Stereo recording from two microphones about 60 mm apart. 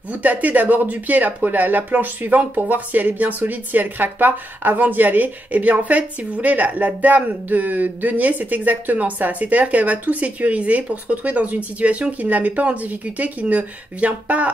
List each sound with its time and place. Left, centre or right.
0.1 s speech: right